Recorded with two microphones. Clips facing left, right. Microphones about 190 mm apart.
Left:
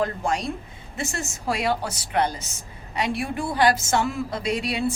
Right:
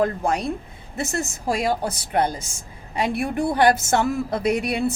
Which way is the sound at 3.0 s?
55° right (ahead or behind).